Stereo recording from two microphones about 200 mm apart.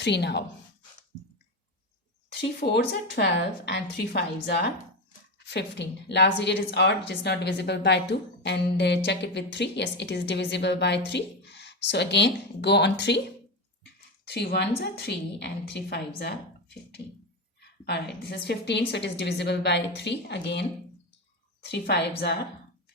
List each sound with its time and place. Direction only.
0.0 s a woman's voice: 55° left (ahead or behind)
2.3 s a woman's voice: 55° left (ahead or behind)
14.3 s a woman's voice: 55° left (ahead or behind)